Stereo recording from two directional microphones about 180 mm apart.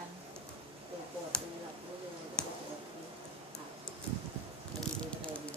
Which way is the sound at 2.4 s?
5° left (ahead or behind).